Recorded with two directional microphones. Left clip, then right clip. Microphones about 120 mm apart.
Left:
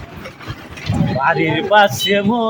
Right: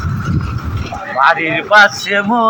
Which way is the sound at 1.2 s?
40° left (ahead or behind).